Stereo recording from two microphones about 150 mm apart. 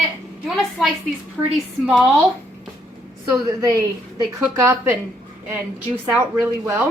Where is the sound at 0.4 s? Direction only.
Centre (ahead or behind).